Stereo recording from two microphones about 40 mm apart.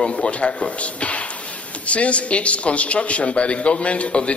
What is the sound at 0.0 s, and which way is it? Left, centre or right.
A man's voice, left.